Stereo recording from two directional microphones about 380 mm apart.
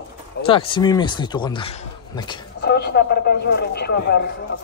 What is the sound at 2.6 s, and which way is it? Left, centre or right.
Speech, left.